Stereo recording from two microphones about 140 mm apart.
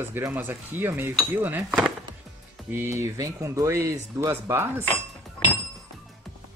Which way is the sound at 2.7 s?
15° right (ahead or behind).